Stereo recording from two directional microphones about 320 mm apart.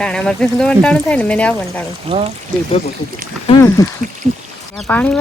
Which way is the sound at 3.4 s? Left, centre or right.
Centre.